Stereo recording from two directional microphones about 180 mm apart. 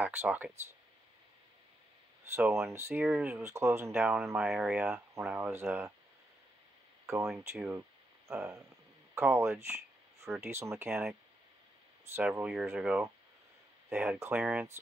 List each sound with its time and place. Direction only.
0.0 s speech: 10° right (ahead or behind)
2.3 s speech: 15° right (ahead or behind)
7.3 s speech: 15° right (ahead or behind)
10.9 s speech: centre (ahead or behind)
12.2 s speech: 10° right (ahead or behind)